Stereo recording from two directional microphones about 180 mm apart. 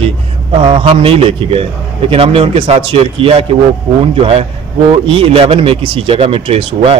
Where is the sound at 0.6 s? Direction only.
30° right (ahead or behind).